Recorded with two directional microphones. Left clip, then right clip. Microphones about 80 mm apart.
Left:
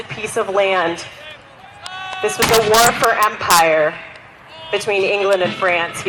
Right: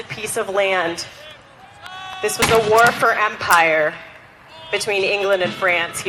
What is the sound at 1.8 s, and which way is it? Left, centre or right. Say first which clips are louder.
Sheep: left 4 dB; centre.